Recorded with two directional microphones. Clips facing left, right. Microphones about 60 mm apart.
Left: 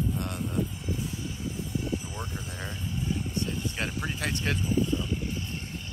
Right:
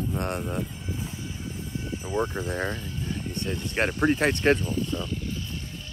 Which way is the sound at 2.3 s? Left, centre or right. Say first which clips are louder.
Right 9 dB; right.